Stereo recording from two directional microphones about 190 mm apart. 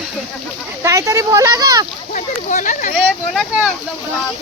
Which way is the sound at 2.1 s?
40° left (ahead or behind).